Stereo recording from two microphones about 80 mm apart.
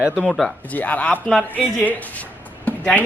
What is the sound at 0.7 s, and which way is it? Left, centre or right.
A man's voice, centre.